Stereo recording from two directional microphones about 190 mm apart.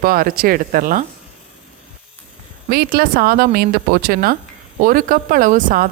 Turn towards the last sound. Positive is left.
turn(degrees=-45)  # may be behind; listen again after turning